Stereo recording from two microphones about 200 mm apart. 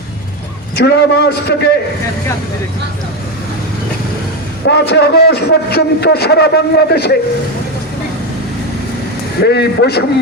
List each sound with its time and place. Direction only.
0.8 s a man's voice: 55° left (ahead or behind)
4.6 s a man's voice: 60° left (ahead or behind)
9.4 s a man's voice: 55° left (ahead or behind)